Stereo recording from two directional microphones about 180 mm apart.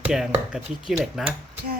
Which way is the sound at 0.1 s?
5° right (ahead or behind).